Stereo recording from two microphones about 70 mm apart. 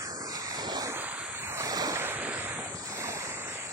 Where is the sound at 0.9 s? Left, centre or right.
Right.